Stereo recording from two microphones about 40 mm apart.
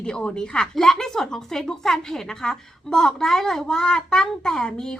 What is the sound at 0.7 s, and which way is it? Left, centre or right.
Speech, centre.